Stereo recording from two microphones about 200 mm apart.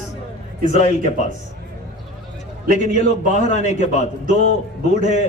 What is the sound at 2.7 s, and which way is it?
A man's voice, 35° left (ahead or behind).